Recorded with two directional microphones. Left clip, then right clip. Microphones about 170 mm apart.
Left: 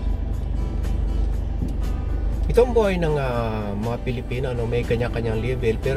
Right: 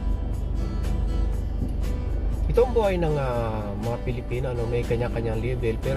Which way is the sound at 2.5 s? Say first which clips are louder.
Left 3 dB; 25° left (ahead or behind).